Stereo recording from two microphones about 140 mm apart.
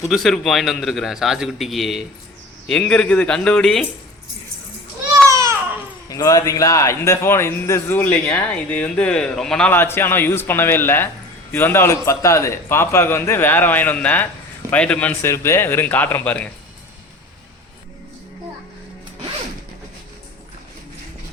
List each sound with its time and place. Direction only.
0.1 s a man's voice: centre (ahead or behind)
5.3 s baby cry: 20° right (ahead or behind)
6.1 s speech: 25° left (ahead or behind)